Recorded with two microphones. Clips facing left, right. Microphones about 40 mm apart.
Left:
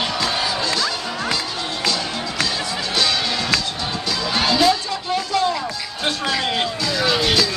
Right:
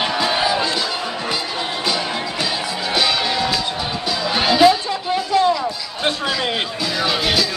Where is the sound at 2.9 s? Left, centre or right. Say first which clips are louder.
Right 2 dB; centre.